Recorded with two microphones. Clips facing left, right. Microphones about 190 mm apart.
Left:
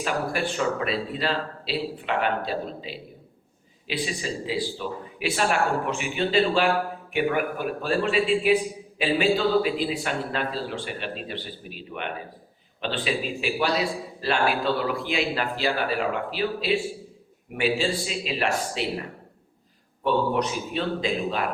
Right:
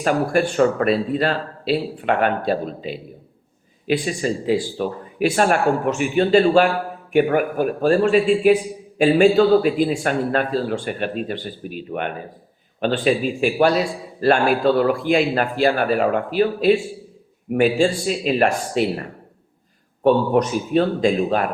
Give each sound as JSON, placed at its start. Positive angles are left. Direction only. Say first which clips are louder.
{"t": 0.0, "sound": "speech", "louder": "right 8 dB", "side_deg": -45}
{"t": 20.1, "sound": "speech", "louder": "right 7 dB", "side_deg": -45}